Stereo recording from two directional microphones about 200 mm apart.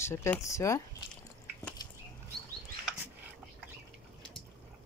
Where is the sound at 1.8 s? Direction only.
20° left (ahead or behind).